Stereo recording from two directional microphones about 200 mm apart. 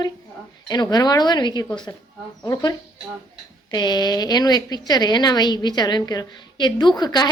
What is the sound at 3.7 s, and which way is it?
A woman's voice, 20° left (ahead or behind).